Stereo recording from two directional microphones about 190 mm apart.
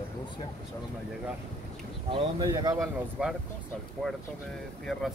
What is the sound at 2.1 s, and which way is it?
Speech, 20° right (ahead or behind).